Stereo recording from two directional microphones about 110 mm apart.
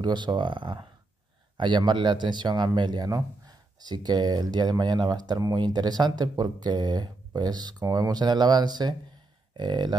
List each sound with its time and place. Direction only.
0.0 s speech: 45° right (ahead or behind)